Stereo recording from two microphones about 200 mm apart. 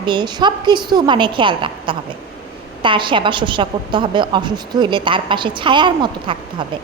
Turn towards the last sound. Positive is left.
turn(degrees=-25)  # may be behind; listen again after turning